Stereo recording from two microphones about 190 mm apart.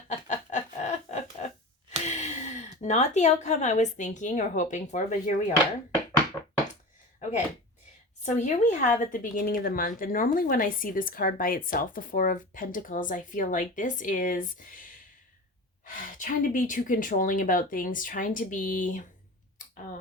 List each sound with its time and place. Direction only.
0.1 s snicker: 40° left (ahead or behind)
2.0 s speech: 35° left (ahead or behind)
8.2 s speech: 40° left (ahead or behind)
15.8 s speech: 45° left (ahead or behind)